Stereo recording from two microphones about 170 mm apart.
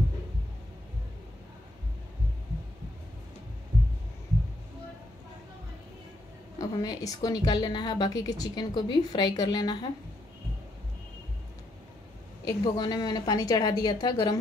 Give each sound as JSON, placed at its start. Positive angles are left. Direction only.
{"t": 6.6, "sound": "a woman's voice", "side_deg": 20}
{"t": 12.4, "sound": "a woman's voice", "side_deg": 25}